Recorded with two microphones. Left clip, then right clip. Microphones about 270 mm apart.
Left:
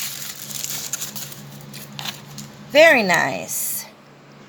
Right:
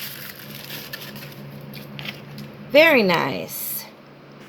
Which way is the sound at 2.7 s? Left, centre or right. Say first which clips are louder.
Left 2 dB; centre.